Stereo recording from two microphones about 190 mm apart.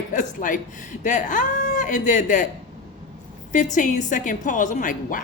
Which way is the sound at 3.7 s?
40° left (ahead or behind).